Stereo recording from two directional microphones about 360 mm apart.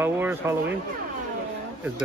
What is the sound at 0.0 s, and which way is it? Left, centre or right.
Speech, centre.